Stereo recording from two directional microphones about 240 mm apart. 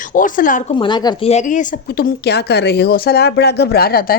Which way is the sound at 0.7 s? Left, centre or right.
Centre.